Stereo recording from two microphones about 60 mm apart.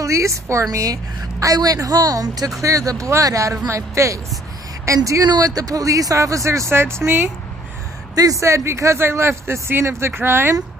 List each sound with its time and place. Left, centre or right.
0.0 s speech: right
0.7 s speech: right
2.6 s speech: right
6.7 s speech: right
8.1 s speech: right